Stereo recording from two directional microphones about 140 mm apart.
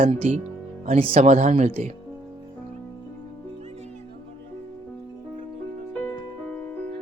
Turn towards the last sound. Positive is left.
turn(degrees=10)  # may be behind; listen again after turning